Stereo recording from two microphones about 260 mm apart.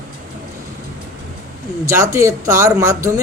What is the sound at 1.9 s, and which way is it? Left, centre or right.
Speech, centre.